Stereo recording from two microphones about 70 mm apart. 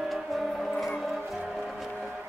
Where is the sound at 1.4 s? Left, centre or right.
Centre.